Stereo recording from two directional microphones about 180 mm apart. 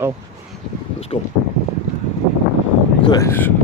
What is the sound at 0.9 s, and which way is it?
Boat, 35° left (ahead or behind).